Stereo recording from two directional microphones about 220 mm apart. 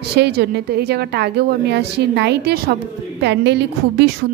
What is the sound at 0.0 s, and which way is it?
A woman's voice, 50° right (ahead or behind).